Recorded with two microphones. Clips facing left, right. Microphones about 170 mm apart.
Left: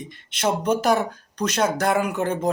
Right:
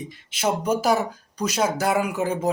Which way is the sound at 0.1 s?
5° right (ahead or behind).